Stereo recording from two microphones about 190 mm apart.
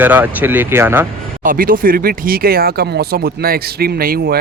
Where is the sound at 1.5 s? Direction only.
50° right (ahead or behind).